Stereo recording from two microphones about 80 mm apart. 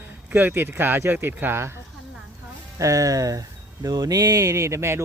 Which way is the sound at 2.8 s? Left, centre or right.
Right.